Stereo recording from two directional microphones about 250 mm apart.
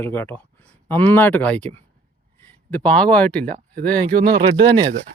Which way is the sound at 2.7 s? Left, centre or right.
Centre.